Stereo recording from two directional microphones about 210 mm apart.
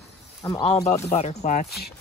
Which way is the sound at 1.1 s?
30° left (ahead or behind).